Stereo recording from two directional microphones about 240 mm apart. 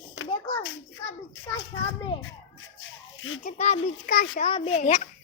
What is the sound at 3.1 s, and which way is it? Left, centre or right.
Speech, left.